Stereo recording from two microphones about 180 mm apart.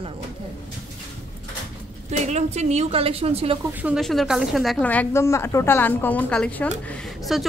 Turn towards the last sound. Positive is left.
turn(degrees=5)  # may be behind; listen again after turning